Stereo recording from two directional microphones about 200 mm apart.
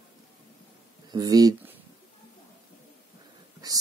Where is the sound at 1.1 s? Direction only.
20° right (ahead or behind).